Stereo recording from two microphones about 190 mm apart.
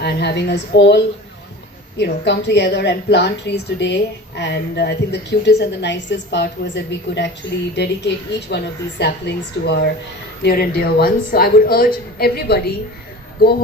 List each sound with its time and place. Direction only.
0.0 s a woman's voice: 60° left (ahead or behind)